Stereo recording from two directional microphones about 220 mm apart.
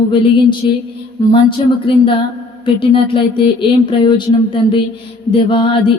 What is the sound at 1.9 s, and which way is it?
Speech, 25° left (ahead or behind).